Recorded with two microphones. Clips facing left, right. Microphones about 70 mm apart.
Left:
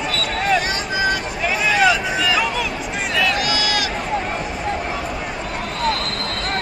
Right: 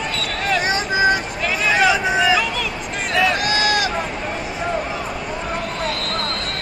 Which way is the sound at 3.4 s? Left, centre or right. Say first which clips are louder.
Right 2 dB; right.